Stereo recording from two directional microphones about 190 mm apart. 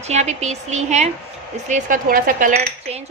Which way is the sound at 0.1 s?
35° right (ahead or behind).